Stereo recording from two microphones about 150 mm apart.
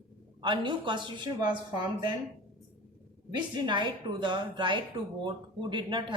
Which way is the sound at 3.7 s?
30° right (ahead or behind).